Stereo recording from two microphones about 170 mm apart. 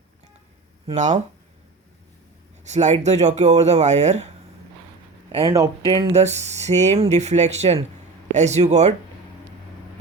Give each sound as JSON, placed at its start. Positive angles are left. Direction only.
{"t": 0.9, "sound": "speech", "side_deg": -45}
{"t": 2.6, "sound": "speech", "side_deg": -40}
{"t": 5.3, "sound": "speech", "side_deg": -20}
{"t": 6.1, "sound": "speech", "side_deg": -40}